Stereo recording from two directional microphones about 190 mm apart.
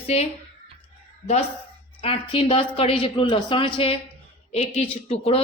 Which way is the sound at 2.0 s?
25° left (ahead or behind).